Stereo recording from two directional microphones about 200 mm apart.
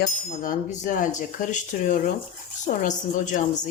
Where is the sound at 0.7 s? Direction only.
40° left (ahead or behind).